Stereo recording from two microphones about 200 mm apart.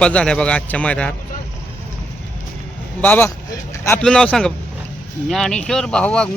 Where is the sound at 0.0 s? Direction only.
5° left (ahead or behind).